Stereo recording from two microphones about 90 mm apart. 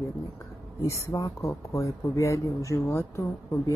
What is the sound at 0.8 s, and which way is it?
Speech, 35° left (ahead or behind).